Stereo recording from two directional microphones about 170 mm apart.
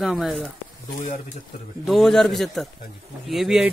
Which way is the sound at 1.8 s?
Centre (ahead or behind).